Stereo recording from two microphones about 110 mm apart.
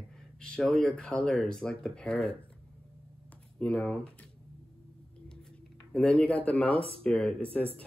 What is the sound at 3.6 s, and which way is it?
Speech, 10° left (ahead or behind).